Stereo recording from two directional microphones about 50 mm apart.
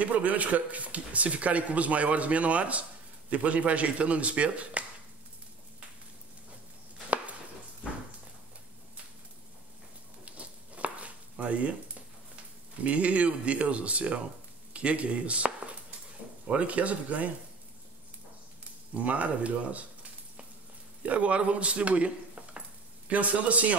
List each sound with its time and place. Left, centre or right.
0.0 s a man's voice: right
10.2 s a sound: right
12.8 s a man's voice: right
18.9 s a man's voice: right
21.0 s a man's voice: right